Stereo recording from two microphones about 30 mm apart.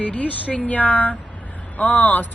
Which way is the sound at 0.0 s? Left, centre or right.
Left.